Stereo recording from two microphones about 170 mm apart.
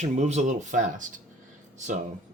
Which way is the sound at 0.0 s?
45° right (ahead or behind).